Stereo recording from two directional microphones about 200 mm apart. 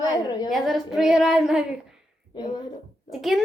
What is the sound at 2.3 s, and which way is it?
Speech, 20° left (ahead or behind).